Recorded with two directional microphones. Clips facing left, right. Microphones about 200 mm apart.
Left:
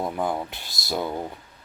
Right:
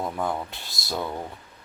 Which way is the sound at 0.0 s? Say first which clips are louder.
Left 2 dB; 10° left (ahead or behind).